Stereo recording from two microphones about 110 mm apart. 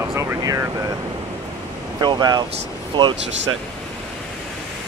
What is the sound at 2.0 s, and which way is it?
Speech, 40° right (ahead or behind).